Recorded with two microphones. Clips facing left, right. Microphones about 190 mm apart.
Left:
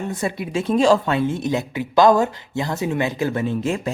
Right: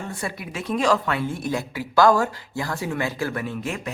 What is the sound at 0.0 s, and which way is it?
Speech, 20° left (ahead or behind).